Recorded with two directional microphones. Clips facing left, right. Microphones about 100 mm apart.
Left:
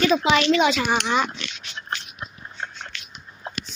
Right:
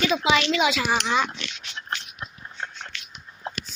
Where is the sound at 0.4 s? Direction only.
5° right (ahead or behind).